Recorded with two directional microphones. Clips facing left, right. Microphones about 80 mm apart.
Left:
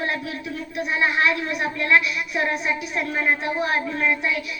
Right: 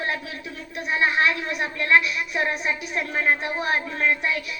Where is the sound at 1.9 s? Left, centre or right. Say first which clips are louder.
Right 1 dB; right.